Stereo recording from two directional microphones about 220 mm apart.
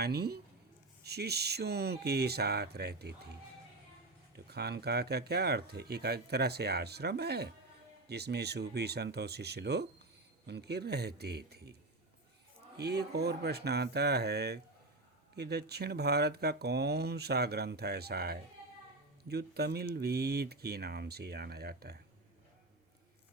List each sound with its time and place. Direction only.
0.0 s speech: 45° right (ahead or behind)
4.4 s speech: 45° right (ahead or behind)